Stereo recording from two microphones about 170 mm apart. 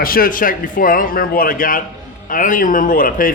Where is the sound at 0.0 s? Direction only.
60° left (ahead or behind).